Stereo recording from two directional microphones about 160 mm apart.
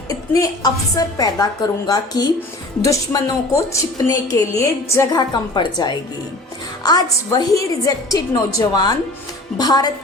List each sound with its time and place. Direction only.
0.1 s a woman's voice: 20° left (ahead or behind)